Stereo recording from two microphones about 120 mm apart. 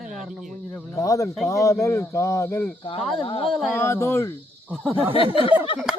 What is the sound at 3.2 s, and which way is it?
Speech, 50° left (ahead or behind).